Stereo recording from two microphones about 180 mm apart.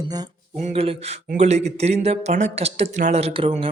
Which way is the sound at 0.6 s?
35° right (ahead or behind).